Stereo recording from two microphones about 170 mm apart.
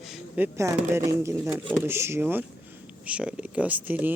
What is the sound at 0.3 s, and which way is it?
Speech, 15° right (ahead or behind).